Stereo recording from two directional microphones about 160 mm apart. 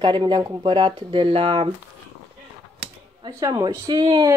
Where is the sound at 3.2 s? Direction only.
25° right (ahead or behind).